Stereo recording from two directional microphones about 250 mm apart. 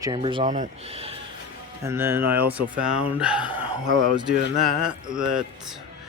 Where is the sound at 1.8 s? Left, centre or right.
Centre.